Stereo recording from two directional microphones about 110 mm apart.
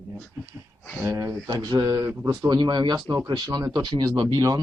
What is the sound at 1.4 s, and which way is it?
Speech, 45° right (ahead or behind).